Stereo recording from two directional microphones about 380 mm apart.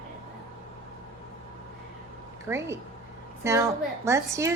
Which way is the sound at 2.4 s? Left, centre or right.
Centre.